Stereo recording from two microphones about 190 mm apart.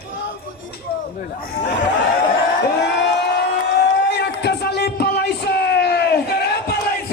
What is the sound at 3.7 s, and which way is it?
Music, 60° left (ahead or behind).